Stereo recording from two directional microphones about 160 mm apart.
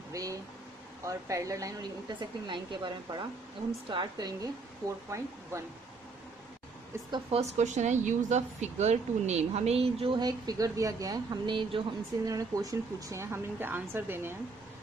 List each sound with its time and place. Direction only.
0.1 s speech: 20° right (ahead or behind)
7.3 s speech: 40° right (ahead or behind); by 14.3 s 15° right (ahead or behind)